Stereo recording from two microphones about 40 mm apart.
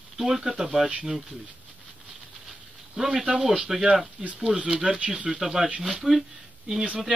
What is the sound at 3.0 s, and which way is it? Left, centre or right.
Speech, centre.